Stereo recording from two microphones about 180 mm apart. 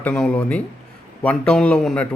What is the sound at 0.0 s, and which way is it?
Speech, 5° left (ahead or behind).